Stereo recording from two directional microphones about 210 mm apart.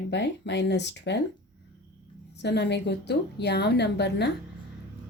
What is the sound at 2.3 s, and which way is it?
A woman's voice, 55° left (ahead or behind).